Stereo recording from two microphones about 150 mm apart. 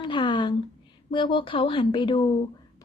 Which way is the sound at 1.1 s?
35° left (ahead or behind).